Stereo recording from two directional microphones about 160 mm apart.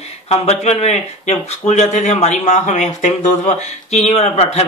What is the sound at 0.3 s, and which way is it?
Speech, 40° left (ahead or behind).